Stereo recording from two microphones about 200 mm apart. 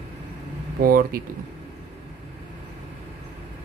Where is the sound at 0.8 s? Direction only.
45° right (ahead or behind).